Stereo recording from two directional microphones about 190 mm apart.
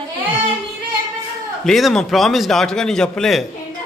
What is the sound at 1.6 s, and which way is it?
A man's voice, centre (ahead or behind).